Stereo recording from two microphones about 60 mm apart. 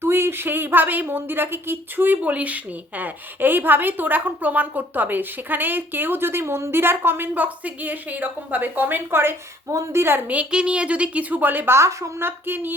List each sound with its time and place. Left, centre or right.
0.0 s a woman's voice: right
10.2 s a woman's voice: right
11.7 s a woman's voice: right